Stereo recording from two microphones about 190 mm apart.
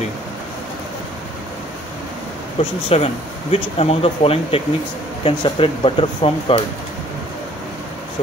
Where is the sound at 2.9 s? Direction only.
30° left (ahead or behind).